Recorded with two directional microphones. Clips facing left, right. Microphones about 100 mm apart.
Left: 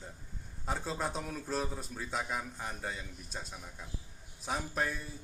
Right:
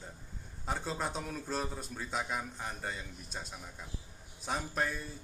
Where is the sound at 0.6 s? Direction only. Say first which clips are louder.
Even; centre (ahead or behind).